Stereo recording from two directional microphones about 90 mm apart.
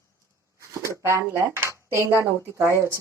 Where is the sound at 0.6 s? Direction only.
30° right (ahead or behind).